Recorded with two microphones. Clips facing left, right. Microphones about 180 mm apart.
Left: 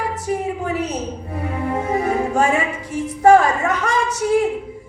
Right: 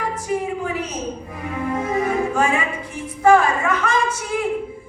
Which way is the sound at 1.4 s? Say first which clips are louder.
Left 2 dB; 35° left (ahead or behind).